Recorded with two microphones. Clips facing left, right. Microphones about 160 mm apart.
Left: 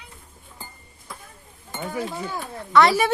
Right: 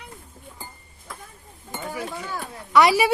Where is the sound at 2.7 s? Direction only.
10° right (ahead or behind).